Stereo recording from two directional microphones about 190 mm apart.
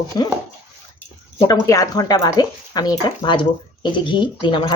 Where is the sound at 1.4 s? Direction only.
20° left (ahead or behind).